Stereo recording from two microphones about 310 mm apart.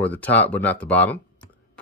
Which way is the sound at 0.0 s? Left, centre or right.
Centre.